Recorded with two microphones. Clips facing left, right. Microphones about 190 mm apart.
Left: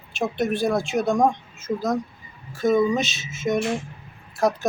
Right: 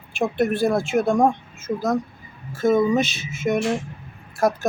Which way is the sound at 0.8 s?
50° right (ahead or behind).